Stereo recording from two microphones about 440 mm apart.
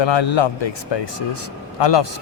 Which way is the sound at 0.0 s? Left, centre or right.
Left.